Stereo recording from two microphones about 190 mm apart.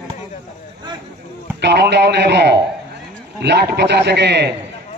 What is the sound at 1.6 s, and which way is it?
Speech, 60° right (ahead or behind).